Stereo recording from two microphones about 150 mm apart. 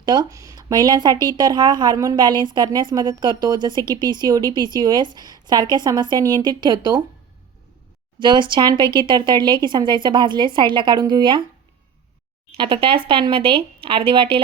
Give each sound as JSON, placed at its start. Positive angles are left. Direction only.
{"t": 0.0, "sound": "a woman's voice", "side_deg": -30}
{"t": 8.2, "sound": "speech", "side_deg": -30}
{"t": 12.5, "sound": "speech", "side_deg": -35}